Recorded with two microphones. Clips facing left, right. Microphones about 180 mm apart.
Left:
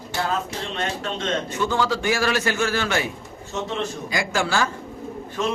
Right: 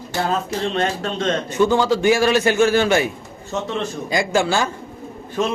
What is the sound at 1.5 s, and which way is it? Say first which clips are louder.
A man's voice: right 9 dB; 20° right (ahead or behind).